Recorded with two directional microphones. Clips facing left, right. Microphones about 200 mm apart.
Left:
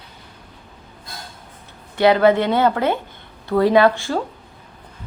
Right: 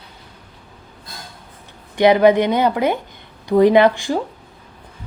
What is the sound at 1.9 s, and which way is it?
Speech, 15° right (ahead or behind).